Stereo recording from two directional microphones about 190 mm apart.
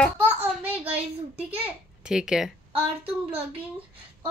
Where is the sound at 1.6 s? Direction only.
5° right (ahead or behind).